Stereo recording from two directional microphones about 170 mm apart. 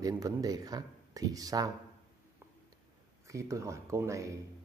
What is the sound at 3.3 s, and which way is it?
Speech, 20° right (ahead or behind).